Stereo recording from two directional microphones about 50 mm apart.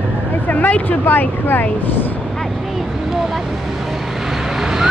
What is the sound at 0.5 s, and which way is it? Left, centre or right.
Speech, left.